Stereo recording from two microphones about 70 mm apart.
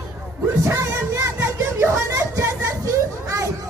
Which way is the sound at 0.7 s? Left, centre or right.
Right.